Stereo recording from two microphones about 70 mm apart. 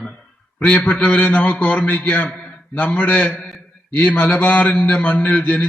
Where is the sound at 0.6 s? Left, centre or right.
Left.